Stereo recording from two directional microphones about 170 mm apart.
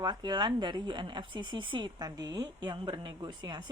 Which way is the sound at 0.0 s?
25° right (ahead or behind).